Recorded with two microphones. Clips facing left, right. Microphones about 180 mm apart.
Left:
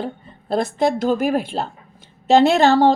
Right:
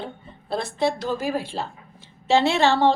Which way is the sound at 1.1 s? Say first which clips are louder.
Left 6 dB; 60° left (ahead or behind).